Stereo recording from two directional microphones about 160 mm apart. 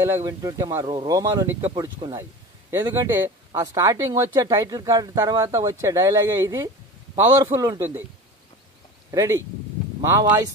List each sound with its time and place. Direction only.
0.0 s speech: 20° right (ahead or behind)
9.1 s speech: 20° right (ahead or behind)